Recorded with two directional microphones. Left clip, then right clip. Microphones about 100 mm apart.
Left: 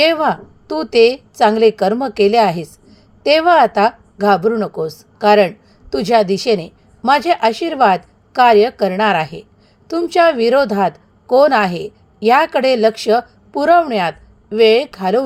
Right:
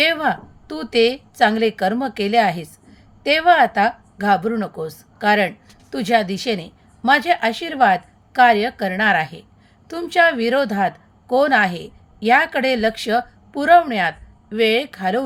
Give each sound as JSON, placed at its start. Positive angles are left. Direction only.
{"t": 0.0, "sound": "a woman's voice", "side_deg": 25}